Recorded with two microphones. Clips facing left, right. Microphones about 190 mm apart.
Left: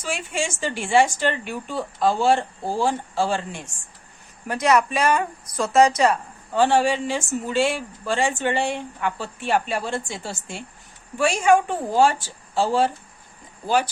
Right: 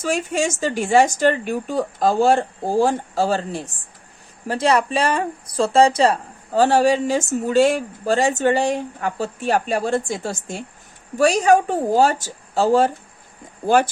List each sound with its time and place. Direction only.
0.0 s speech: 40° right (ahead or behind)